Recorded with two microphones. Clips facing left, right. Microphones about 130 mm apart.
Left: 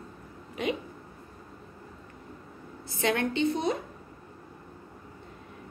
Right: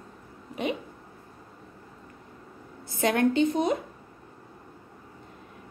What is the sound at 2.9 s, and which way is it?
Speech, 45° right (ahead or behind).